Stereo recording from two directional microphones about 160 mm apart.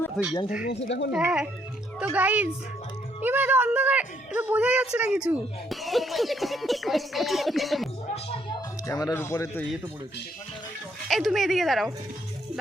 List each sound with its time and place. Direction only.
0.7 s speech: 90° left
1.1 s speech: 5° right (ahead or behind)
8.9 s a man's voice: 20° left (ahead or behind)
11.1 s speech: centre (ahead or behind)